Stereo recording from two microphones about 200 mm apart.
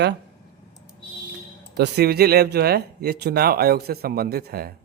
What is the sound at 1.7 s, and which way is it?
Speech, 55° right (ahead or behind).